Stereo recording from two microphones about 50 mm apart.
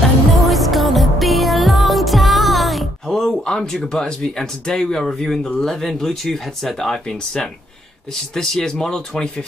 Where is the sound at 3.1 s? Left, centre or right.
Centre.